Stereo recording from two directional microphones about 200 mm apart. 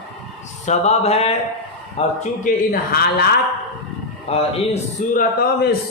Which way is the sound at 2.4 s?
50° left (ahead or behind).